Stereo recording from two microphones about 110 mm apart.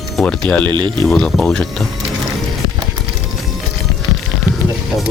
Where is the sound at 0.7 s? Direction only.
45° right (ahead or behind).